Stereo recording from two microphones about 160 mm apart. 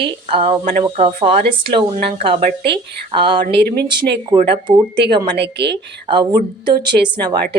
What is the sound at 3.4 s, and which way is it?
Speech, 85° right.